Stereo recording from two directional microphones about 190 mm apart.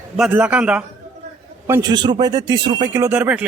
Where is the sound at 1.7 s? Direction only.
20° right (ahead or behind).